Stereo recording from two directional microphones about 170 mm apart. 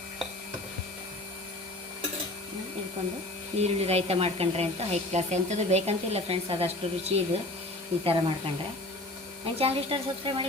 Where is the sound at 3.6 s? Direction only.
40° right (ahead or behind).